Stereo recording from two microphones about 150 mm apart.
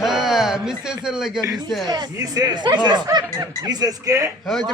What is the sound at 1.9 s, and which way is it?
Speech, 25° right (ahead or behind).